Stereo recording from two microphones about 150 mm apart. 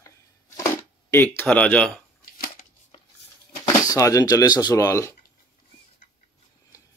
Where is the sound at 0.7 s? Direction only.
15° left (ahead or behind).